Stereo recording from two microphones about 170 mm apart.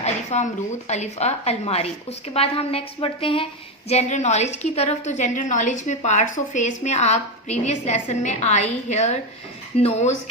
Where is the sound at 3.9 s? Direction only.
45° left (ahead or behind).